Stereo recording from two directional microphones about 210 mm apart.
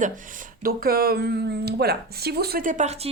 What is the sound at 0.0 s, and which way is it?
Speech, 40° right (ahead or behind).